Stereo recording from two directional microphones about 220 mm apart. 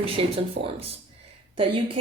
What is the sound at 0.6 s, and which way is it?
Speech, 55° right (ahead or behind).